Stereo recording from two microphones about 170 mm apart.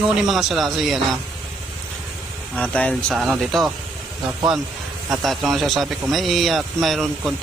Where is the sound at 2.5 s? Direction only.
10° left (ahead or behind).